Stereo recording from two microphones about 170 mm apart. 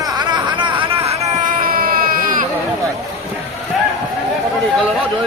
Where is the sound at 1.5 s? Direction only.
55° right (ahead or behind).